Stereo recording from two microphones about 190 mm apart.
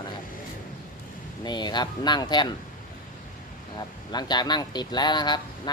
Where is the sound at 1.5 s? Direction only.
20° left (ahead or behind).